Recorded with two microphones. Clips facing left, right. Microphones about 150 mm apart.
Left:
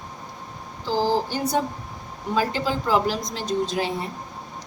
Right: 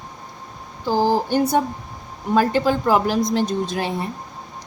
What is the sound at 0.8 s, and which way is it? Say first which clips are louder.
Speech: right 4 dB; 55° right (ahead or behind).